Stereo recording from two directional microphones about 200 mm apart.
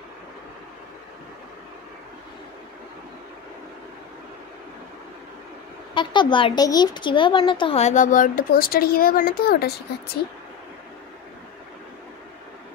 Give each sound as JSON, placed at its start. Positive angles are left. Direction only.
{"t": 5.9, "sound": "speech", "side_deg": 25}